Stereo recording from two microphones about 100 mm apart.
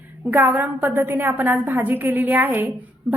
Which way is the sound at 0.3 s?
15° right (ahead or behind).